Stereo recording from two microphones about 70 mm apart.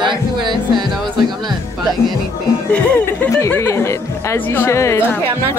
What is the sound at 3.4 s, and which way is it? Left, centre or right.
A woman's voice, left.